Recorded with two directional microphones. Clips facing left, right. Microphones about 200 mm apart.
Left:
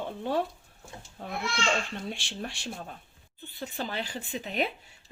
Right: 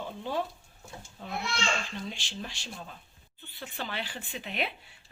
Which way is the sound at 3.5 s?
40° left (ahead or behind).